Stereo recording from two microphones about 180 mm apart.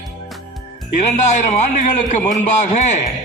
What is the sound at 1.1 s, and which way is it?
A man's voice, 40° left (ahead or behind).